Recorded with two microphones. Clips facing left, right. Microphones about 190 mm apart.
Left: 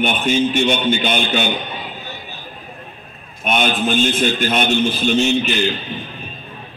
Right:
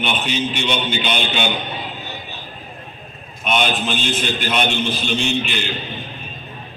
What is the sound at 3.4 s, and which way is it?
A man's voice, 50° left (ahead or behind).